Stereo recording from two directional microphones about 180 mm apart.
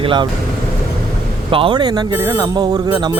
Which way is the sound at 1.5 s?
30° right (ahead or behind).